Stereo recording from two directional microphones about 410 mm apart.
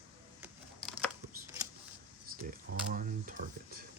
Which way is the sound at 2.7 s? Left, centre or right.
Centre.